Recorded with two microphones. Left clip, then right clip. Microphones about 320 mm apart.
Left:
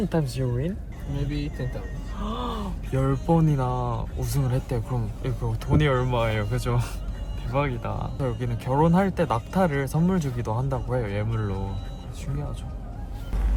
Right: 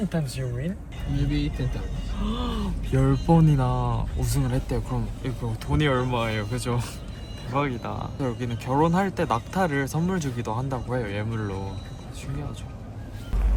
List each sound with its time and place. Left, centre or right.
0.1 s speech: left
2.2 s groan: centre
3.0 s speech: centre